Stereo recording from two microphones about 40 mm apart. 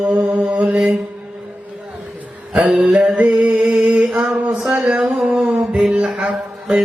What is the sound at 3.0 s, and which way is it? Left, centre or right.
Music, right.